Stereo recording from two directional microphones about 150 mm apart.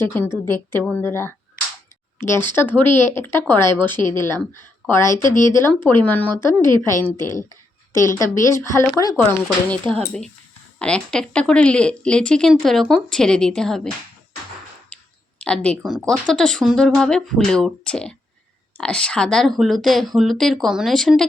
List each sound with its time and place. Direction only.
0.0 s a woman's voice: 15° left (ahead or behind)
9.9 s speech: 5° left (ahead or behind)
14.9 s a sound: 5° left (ahead or behind)
15.4 s speech: 5° left (ahead or behind)